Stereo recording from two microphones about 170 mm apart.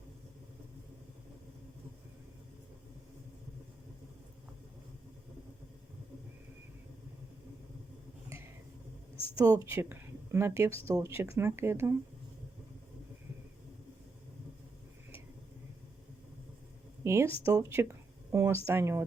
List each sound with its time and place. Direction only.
8.3 s a sound: 15° right (ahead or behind)
9.4 s speech: 20° right (ahead or behind)
17.0 s speech: 15° right (ahead or behind)